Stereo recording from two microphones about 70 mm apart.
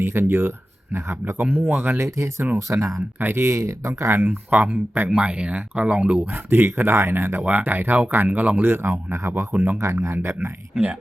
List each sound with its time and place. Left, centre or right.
0.0 s speech: right
1.5 s speech: right
2.0 s speech: right
3.2 s speech: right
4.4 s speech: right
9.7 s speech: right